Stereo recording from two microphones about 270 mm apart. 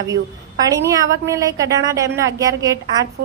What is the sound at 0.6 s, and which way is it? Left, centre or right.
Speech, centre.